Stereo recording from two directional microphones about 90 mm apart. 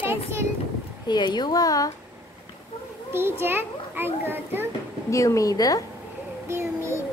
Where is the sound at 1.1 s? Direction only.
55° left (ahead or behind).